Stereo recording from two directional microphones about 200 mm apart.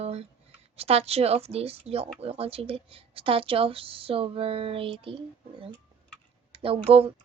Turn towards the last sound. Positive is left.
turn(degrees=-30)  # may be behind; listen again after turning